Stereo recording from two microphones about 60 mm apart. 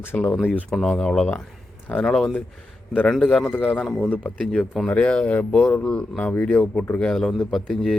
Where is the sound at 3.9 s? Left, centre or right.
Left.